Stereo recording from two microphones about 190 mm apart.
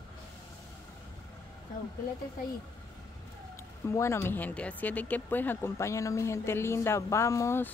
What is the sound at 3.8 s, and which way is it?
Speech, 15° left (ahead or behind).